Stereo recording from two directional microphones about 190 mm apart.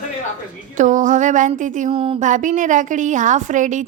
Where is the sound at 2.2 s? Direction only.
40° right (ahead or behind).